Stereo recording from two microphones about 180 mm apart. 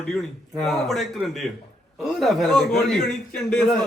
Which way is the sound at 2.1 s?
Centre (ahead or behind).